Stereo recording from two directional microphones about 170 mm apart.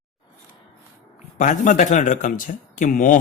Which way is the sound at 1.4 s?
50° left (ahead or behind).